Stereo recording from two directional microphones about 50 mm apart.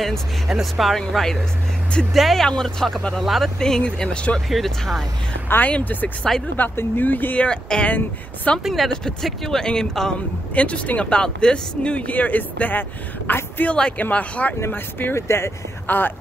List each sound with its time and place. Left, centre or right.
0.5 s speech: centre
2.4 s speech: centre
3.5 s speech: centre
4.5 s speech: centre
5.6 s speech: left
7.3 s speech: left
8.6 s speech: centre
10.5 s speech: left
12.1 s speech: left
13.7 s speech: centre
14.7 s speech: left
15.1 s speech: left
15.9 s speech: left